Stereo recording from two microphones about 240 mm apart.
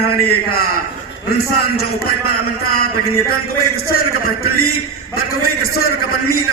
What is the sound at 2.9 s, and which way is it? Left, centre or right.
A man's voice, left.